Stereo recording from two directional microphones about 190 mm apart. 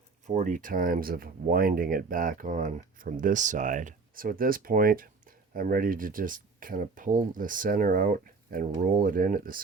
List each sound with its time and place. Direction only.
0.3 s speech: 40° right (ahead or behind)